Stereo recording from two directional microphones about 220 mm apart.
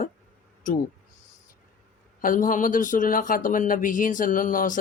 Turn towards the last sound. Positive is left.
turn(degrees=40)  # may be behind; listen again after turning